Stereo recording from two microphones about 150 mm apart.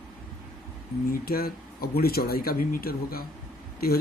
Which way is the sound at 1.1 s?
80° left.